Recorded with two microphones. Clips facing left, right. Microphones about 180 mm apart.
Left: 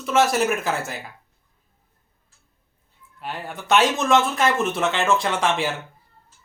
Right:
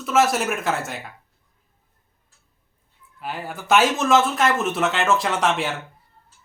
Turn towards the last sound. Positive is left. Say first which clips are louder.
# even
turn(degrees=0)  # may be behind; listen again after turning